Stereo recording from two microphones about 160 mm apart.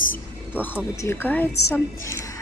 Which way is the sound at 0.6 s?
15° left (ahead or behind).